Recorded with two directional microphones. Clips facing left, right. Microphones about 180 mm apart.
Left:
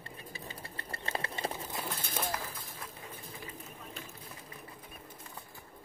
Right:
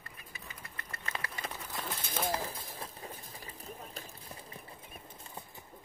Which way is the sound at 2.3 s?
30° right (ahead or behind).